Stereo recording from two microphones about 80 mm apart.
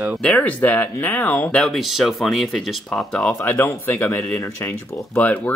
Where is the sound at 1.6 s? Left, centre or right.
Centre.